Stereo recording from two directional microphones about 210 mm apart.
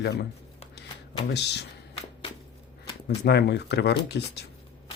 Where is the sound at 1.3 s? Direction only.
50° left (ahead or behind).